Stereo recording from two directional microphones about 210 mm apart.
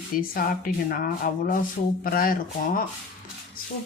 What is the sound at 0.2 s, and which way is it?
Speech, 40° left (ahead or behind).